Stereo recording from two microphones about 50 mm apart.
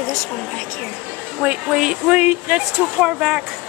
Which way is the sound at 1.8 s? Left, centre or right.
Centre.